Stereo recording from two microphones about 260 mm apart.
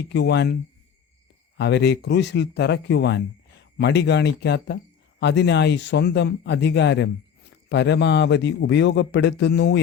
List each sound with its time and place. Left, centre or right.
0.1 s speech: left
1.5 s speech: left